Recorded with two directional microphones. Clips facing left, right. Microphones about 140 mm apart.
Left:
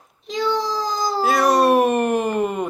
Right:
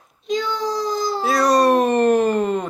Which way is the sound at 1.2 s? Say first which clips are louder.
Even; 5° left (ahead or behind).